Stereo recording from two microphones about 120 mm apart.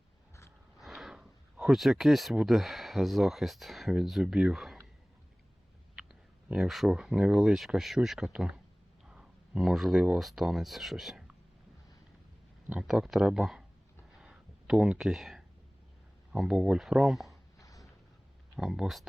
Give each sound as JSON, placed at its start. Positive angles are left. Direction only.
{"t": 0.8, "sound": "speech", "side_deg": -5}
{"t": 6.0, "sound": "speech", "side_deg": -5}
{"t": 12.9, "sound": "speech", "side_deg": -5}
{"t": 14.2, "sound": "a sound", "side_deg": -5}
{"t": 16.3, "sound": "speech", "side_deg": -5}
{"t": 17.6, "sound": "a sound", "side_deg": 30}
{"t": 18.5, "sound": "speech", "side_deg": -5}